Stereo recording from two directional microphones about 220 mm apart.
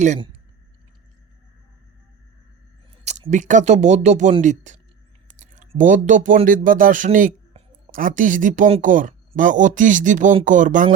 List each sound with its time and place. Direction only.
3.1 s speech: 30° right (ahead or behind)